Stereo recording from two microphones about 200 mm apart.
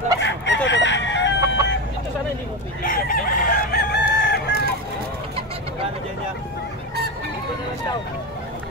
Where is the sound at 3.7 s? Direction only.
55° left (ahead or behind).